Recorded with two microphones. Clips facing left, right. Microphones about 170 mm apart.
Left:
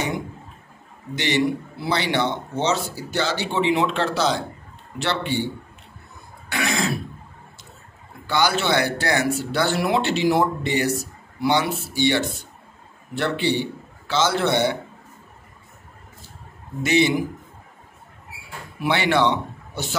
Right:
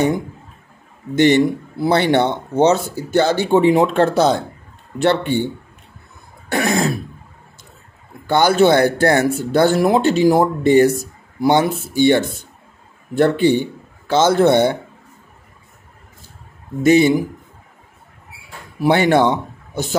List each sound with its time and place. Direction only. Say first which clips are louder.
1.1 s speech: right 9 dB; 50° right (ahead or behind)
6.5 s speech: right 6 dB; 50° right (ahead or behind)
8.3 s a man's voice: right 8 dB; 50° right (ahead or behind)
16.8 s speech: right 7 dB; 45° right (ahead or behind)
18.8 s a man's voice: right 6 dB; 45° right (ahead or behind)